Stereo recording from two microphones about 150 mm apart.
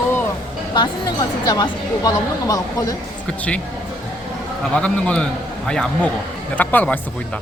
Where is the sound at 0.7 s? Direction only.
30° left (ahead or behind).